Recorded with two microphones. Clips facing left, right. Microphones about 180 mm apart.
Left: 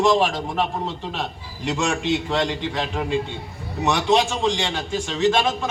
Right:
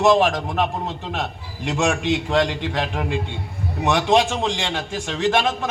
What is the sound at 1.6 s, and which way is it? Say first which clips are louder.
A man's voice: right 2 dB; 65° right (ahead or behind).